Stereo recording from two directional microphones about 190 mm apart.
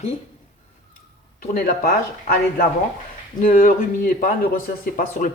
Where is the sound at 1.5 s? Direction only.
50° left (ahead or behind).